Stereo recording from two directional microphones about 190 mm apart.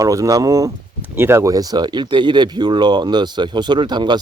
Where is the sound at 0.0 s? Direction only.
15° right (ahead or behind).